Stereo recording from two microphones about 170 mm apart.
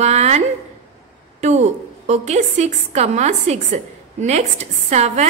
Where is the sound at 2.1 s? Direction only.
40° right (ahead or behind).